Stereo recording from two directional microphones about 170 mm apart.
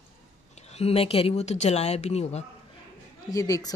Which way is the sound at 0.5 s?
40° left (ahead or behind).